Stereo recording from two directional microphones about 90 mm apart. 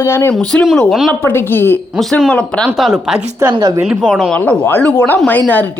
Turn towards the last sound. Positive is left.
turn(degrees=20)  # may be behind; listen again after turning